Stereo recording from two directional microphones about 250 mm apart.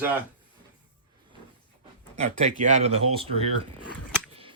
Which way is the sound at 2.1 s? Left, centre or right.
Right.